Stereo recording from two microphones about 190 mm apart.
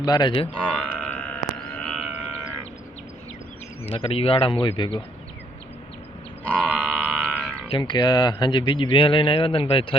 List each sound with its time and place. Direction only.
0.0 s speech: 20° left (ahead or behind)
0.8 s music: centre (ahead or behind)
3.8 s speech: 30° left (ahead or behind)
6.7 s a sound: 5° right (ahead or behind)
7.7 s speech: 25° left (ahead or behind)